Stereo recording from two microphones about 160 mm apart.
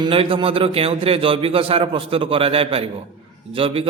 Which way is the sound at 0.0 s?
35° right (ahead or behind).